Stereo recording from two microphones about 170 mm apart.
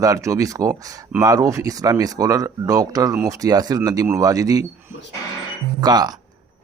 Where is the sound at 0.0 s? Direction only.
20° right (ahead or behind).